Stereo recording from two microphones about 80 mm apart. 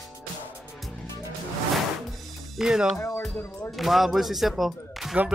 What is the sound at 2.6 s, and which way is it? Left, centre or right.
Speech, centre.